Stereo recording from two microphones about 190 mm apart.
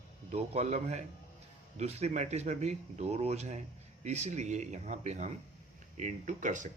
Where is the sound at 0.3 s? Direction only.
35° right (ahead or behind).